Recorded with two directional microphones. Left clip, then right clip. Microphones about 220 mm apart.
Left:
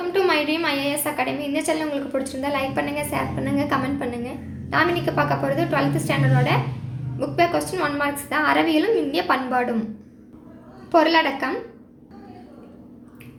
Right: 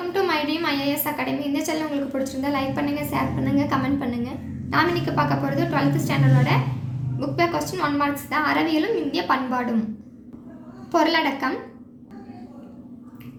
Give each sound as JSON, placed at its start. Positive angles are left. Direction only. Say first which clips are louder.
{"t": 0.1, "sound": "a woman's voice", "louder": "left 3 dB", "side_deg": 15}
{"t": 10.9, "sound": "a woman's voice", "louder": "left 3 dB", "side_deg": 10}